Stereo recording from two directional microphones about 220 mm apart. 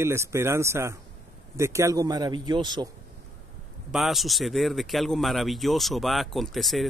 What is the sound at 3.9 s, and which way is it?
Speech, centre (ahead or behind).